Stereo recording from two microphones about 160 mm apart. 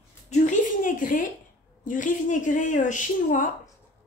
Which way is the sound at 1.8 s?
55° left (ahead or behind).